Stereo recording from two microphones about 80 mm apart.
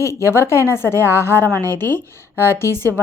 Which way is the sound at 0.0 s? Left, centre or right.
Left.